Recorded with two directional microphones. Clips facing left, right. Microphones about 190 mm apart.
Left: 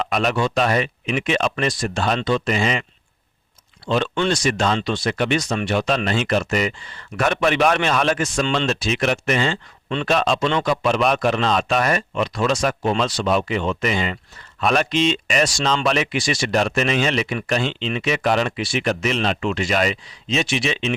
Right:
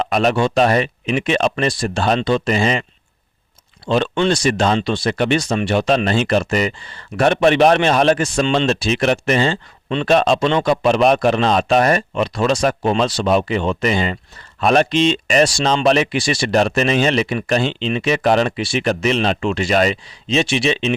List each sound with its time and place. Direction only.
0.0 s a sound: 40° right (ahead or behind)
0.3 s speech: 30° right (ahead or behind)
3.8 s speech: 30° right (ahead or behind)